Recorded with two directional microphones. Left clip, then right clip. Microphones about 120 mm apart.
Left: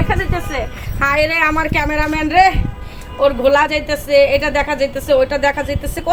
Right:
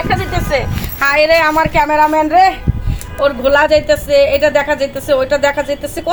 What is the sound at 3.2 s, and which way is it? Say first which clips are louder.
A woman's voice: right 1 dB; 35° left (ahead or behind).